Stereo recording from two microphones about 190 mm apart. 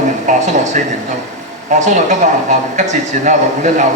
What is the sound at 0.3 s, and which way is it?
Speech, 40° right (ahead or behind).